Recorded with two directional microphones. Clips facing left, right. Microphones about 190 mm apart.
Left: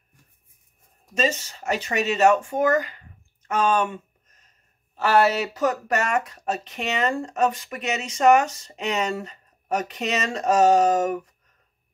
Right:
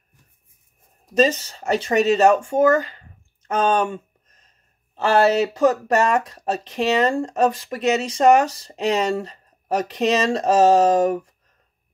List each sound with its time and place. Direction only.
1.1 s speech: 35° right (ahead or behind)
3.4 s a sound: 35° right (ahead or behind)
4.9 s speech: 30° right (ahead or behind)